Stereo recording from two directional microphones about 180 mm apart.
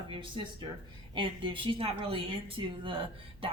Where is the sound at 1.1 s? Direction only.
30° right (ahead or behind).